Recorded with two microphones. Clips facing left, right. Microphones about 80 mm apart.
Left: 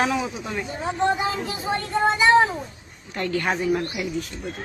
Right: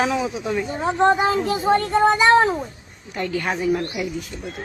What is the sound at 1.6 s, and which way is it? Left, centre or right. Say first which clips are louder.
Speech: right 5 dB; right.